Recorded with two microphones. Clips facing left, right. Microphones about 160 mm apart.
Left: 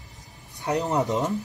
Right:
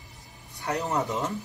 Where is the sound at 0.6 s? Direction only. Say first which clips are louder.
Left 4 dB; 20° left (ahead or behind).